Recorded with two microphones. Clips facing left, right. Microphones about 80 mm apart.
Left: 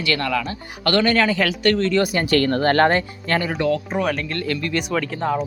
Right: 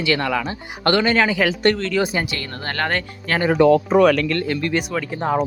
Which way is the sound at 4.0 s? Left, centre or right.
Right.